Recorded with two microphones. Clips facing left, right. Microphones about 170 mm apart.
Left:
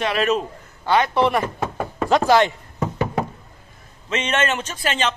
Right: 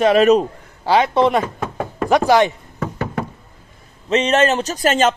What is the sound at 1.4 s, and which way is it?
Knock, centre (ahead or behind).